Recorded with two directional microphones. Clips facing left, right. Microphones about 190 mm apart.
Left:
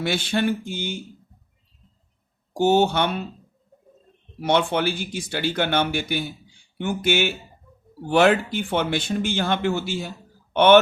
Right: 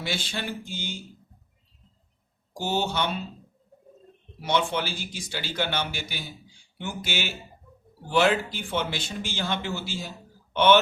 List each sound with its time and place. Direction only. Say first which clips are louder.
0.0 s speech: left 9 dB; 55° left (ahead or behind)
2.5 s speech: left 10 dB; 55° left (ahead or behind)
4.4 s speech: left 5 dB; 55° left (ahead or behind)